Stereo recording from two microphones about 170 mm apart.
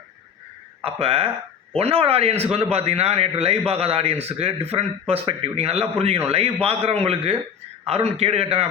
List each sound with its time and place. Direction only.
0.8 s a man's voice: 35° right (ahead or behind)